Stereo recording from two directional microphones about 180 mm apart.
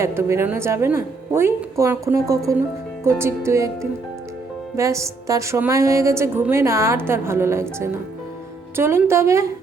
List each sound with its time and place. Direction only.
0.0 s a woman's voice: 15° right (ahead or behind)
4.8 s a woman's voice: 15° right (ahead or behind)